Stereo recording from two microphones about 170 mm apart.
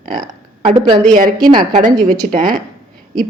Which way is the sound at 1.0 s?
50° right (ahead or behind).